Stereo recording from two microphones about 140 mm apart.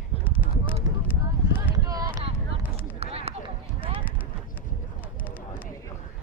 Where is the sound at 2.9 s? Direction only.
45° right (ahead or behind).